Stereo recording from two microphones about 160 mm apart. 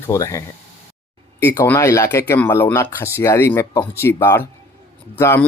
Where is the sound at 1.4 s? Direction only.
15° left (ahead or behind).